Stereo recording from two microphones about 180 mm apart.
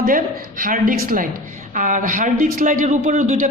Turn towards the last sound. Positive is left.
turn(degrees=-45)  # may be behind; listen again after turning